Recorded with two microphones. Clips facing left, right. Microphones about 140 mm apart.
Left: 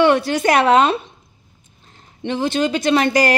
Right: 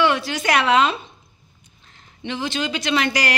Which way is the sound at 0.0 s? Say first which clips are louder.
Left 6 dB; 55° left (ahead or behind).